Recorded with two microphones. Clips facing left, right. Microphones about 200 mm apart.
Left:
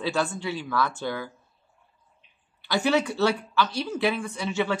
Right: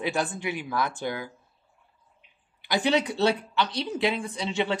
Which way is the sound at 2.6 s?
20° right (ahead or behind).